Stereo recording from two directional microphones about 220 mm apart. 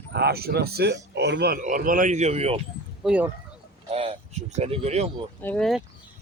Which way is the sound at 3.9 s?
30° right (ahead or behind).